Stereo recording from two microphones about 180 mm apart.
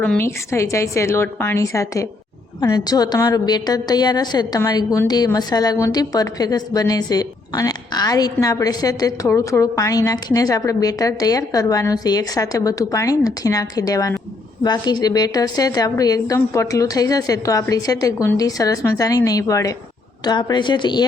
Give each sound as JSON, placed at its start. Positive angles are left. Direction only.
{"t": 0.0, "sound": "a woman's voice", "side_deg": 10}